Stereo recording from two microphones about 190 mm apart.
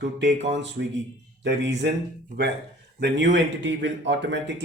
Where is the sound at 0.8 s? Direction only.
65° right (ahead or behind).